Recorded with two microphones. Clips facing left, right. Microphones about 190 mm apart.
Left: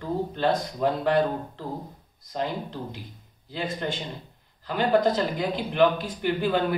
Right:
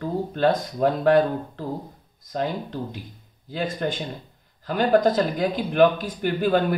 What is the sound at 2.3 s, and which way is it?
Speech, 50° right (ahead or behind).